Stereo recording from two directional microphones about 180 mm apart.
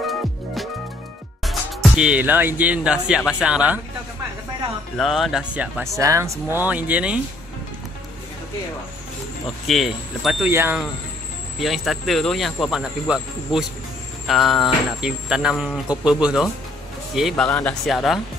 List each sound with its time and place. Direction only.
1.4 s speech: centre (ahead or behind)
4.9 s speech: centre (ahead or behind)
9.7 s speech: centre (ahead or behind)
10.5 s speech: 15° right (ahead or behind)
11.6 s speech: centre (ahead or behind)
13.5 s speech: 30° left (ahead or behind)
14.2 s speech: centre (ahead or behind)